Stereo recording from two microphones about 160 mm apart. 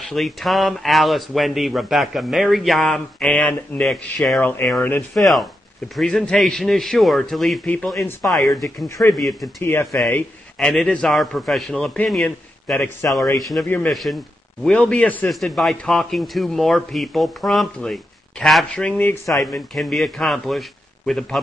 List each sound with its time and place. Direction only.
0.0 s speech: centre (ahead or behind)
8.8 s speech: 20° left (ahead or behind)
9.1 s speech: centre (ahead or behind)
9.6 s speech: 15° left (ahead or behind)
9.9 s speech: 5° left (ahead or behind)
13.4 s speech: centre (ahead or behind); by 19.4 s 15° left (ahead or behind)
19.7 s speech: centre (ahead or behind)